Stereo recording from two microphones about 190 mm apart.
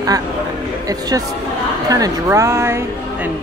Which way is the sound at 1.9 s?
15° right (ahead or behind).